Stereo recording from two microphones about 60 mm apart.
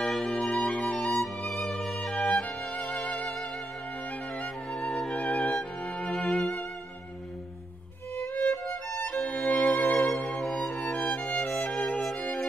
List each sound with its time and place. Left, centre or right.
0.0 s music: centre
4.6 s music: centre
5.1 s music: centre
6.1 s music: centre
8.4 s music: centre
10.2 s music: centre
11.1 s music: left